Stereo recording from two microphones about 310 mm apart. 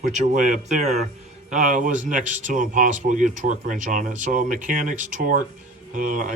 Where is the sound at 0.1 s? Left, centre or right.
Right.